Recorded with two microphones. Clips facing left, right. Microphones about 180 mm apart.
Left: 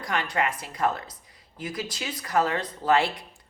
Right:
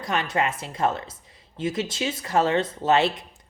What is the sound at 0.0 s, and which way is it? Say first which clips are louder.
Speech: right 2 dB; 25° right (ahead or behind).